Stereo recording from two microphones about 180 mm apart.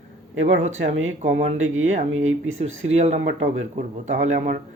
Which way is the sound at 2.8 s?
35° right (ahead or behind).